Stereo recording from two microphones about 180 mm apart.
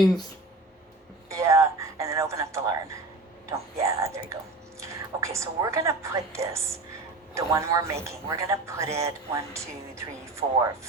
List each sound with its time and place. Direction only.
1.3 s a sound: 15° right (ahead or behind)
4.8 s whispering: 15° right (ahead or behind)
7.3 s speech: 15° right (ahead or behind)